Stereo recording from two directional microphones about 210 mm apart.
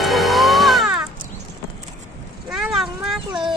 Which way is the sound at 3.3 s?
25° right (ahead or behind).